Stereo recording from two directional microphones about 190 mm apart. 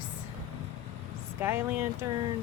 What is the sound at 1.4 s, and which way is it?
Speech, 10° right (ahead or behind).